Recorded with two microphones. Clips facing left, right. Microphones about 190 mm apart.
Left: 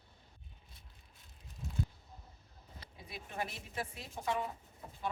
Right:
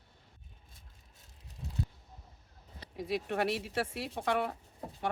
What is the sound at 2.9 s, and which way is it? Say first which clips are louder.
Speech: right 13 dB; 80° right.